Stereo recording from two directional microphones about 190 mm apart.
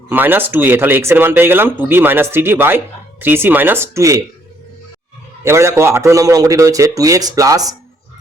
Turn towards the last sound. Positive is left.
turn(degrees=-20)  # may be behind; listen again after turning